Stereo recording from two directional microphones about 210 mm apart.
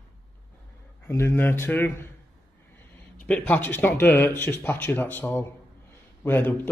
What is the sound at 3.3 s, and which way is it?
Speech, 10° left (ahead or behind).